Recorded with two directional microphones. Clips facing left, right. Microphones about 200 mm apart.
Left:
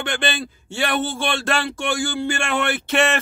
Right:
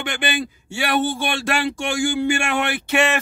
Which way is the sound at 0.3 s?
10° right (ahead or behind).